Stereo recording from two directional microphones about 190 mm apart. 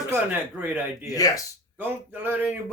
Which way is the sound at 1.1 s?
20° left (ahead or behind).